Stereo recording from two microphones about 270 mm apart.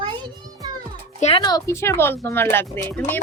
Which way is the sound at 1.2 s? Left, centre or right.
Centre.